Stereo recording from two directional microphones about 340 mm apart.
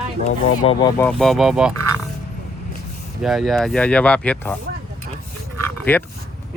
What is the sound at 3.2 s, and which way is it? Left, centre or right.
Speech, centre.